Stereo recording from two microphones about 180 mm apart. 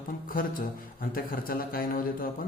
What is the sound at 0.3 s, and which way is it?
A man's voice, 50° left (ahead or behind).